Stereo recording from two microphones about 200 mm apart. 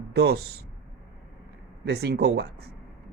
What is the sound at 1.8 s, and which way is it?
Speech, 55° right (ahead or behind).